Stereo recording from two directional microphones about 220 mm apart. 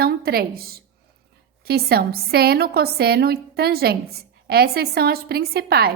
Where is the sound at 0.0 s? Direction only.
45° right (ahead or behind).